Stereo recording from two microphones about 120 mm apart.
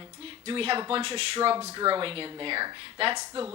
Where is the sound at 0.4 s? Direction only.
50° right (ahead or behind).